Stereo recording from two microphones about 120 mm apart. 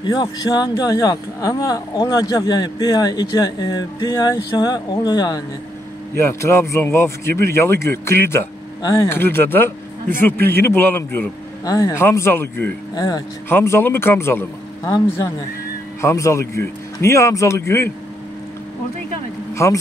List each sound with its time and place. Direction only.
0.0 s a man's voice: 35° left (ahead or behind)
6.1 s a man's voice: 20° left (ahead or behind)
8.8 s speech: 30° left (ahead or behind)
9.1 s a man's voice: 20° left (ahead or behind)
11.6 s a man's voice: 30° left (ahead or behind)
12.9 s speech: 35° left (ahead or behind)
13.5 s a man's voice: 20° left (ahead or behind)
16.0 s a man's voice: 25° left (ahead or behind)
19.5 s a man's voice: 25° left (ahead or behind)